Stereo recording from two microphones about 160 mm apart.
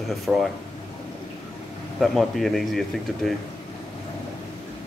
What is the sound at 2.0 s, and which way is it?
Speech, centre (ahead or behind).